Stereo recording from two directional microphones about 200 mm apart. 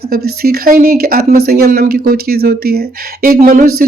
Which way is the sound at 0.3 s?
50° right (ahead or behind).